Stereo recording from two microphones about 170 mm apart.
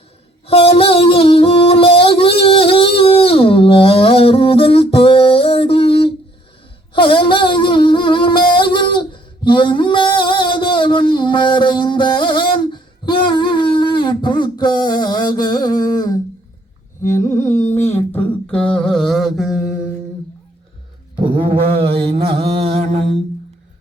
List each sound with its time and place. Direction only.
0.4 s music: 35° left (ahead or behind)
8.5 s a sound: 30° left (ahead or behind)
15.8 s humming: 25° left (ahead or behind)
17.0 s carnatic music: 15° left (ahead or behind)
17.4 s carnatic music: 45° left (ahead or behind)
17.7 s mantra: 15° left (ahead or behind); by 19.6 s centre (ahead or behind)
21.2 s mantra: 30° right (ahead or behind)